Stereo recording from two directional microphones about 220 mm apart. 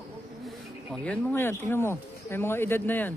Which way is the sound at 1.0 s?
5° left (ahead or behind).